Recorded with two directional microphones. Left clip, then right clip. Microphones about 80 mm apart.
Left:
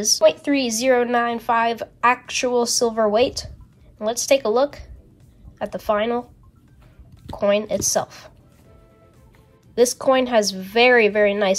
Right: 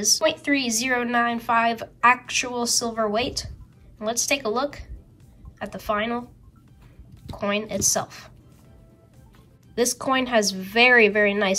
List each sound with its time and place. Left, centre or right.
0.0 s a woman's voice: left
9.8 s a woman's voice: left